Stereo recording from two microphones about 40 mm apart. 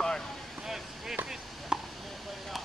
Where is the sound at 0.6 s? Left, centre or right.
Centre.